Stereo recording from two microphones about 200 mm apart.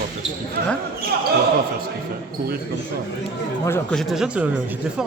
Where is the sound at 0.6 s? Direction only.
45° right (ahead or behind).